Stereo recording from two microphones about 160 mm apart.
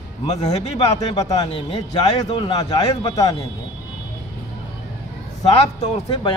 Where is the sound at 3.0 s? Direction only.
20° left (ahead or behind).